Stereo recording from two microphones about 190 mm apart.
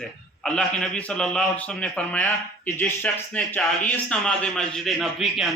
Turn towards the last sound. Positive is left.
turn(degrees=0)  # may be behind; listen again after turning